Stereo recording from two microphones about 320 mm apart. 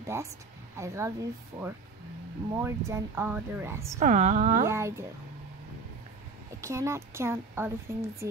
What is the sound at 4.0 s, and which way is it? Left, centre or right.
Speech, right.